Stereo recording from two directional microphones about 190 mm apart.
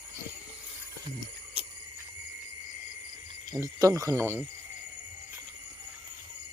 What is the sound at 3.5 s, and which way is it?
Speech, 15° right (ahead or behind).